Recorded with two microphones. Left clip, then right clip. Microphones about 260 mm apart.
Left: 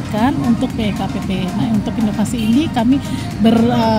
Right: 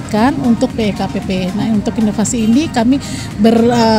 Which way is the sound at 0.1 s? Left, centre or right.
Right.